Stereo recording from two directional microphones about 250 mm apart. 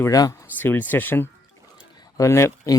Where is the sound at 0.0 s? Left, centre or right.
Centre.